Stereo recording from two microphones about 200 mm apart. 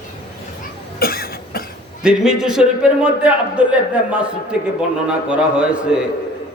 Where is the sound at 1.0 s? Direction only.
50° left (ahead or behind).